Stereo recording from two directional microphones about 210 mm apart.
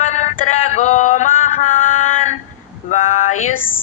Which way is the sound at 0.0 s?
35° left (ahead or behind).